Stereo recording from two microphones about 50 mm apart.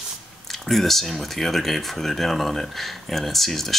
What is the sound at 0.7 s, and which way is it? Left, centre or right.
Speech, centre.